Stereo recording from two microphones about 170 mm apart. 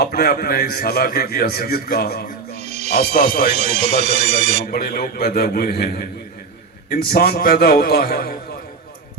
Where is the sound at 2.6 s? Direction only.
40° right (ahead or behind).